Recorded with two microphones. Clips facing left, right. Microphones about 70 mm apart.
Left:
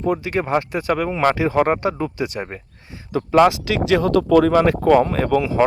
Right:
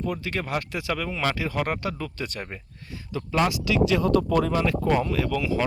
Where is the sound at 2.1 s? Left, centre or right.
Centre.